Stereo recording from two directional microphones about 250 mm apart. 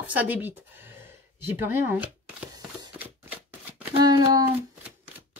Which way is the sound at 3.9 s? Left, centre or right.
Centre.